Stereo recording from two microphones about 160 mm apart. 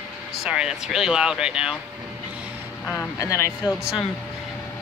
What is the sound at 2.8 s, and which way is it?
Speech, 15° left (ahead or behind).